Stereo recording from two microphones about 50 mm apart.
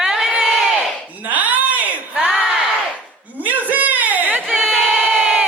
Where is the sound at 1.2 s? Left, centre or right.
Right.